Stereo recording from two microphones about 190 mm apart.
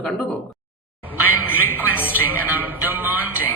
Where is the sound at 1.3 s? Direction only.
90° left.